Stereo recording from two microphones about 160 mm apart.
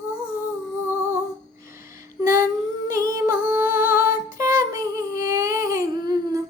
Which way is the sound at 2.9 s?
20° right (ahead or behind).